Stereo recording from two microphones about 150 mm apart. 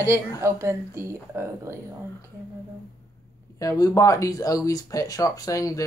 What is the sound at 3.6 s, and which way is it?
Speech, 25° left (ahead or behind).